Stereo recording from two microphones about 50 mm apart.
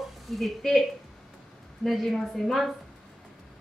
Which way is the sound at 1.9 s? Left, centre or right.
Centre.